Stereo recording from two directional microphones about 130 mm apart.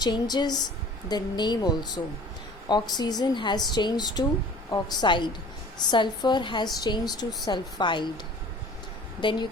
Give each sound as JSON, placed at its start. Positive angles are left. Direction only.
{"t": 0.0, "sound": "speech", "side_deg": 30}
{"t": 9.2, "sound": "speech", "side_deg": 35}